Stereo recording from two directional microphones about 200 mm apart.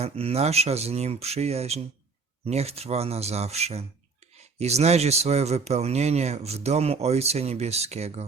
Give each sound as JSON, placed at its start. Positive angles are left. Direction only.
{"t": 0.0, "sound": "speech", "side_deg": -30}